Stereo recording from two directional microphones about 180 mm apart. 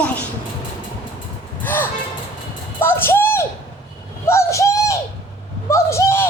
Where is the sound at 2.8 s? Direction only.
10° left (ahead or behind).